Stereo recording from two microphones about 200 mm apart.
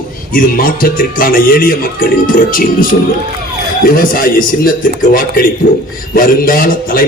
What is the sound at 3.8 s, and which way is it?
A man's voice, 45° left (ahead or behind).